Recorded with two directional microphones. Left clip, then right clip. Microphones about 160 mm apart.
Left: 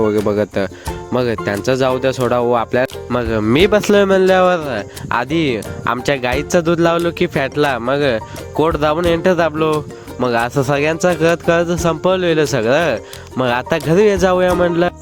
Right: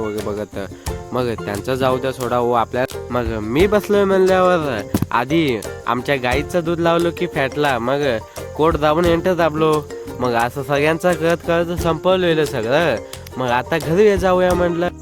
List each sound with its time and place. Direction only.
0.3 s speech: 45° left (ahead or behind)
3.5 s speech: 65° left (ahead or behind)
4.6 s speech: 30° left (ahead or behind)
10.2 s speech: 30° left (ahead or behind); by 14.9 s 45° left (ahead or behind)